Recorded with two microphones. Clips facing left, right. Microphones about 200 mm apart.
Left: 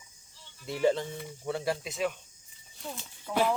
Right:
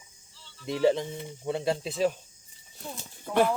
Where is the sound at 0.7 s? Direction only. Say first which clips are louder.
Right 3 dB; 15° right (ahead or behind); by 2.1 s 35° right (ahead or behind).